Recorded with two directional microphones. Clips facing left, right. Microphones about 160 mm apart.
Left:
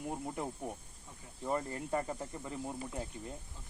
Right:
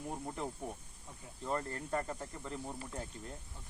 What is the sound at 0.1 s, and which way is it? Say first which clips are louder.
Speech: left 2 dB; 5° left (ahead or behind).